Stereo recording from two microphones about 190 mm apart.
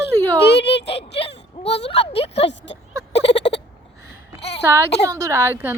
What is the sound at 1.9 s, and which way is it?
Speech, 30° left (ahead or behind).